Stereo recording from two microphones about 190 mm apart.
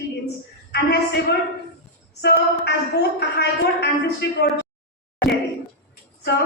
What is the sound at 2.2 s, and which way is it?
A woman's voice, 60° left (ahead or behind).